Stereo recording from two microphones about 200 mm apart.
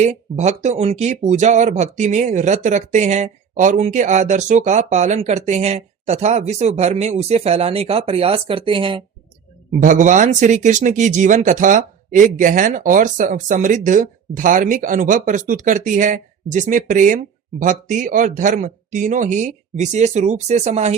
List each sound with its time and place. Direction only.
0.0 s speech: 35° right (ahead or behind)
9.8 s speech: 40° right (ahead or behind)